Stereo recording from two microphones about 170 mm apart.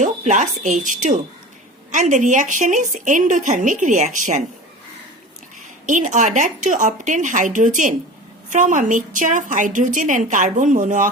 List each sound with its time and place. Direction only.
0.0 s a woman's voice: 45° right (ahead or behind)
5.8 s a woman's voice: 45° right (ahead or behind)